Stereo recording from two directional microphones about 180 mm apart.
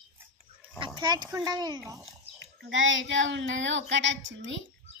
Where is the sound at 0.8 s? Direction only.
25° right (ahead or behind).